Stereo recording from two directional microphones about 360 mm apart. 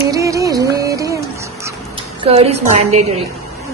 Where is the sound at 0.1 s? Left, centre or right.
Centre.